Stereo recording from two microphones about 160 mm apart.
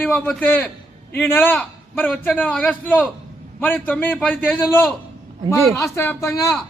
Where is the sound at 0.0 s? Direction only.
5° left (ahead or behind).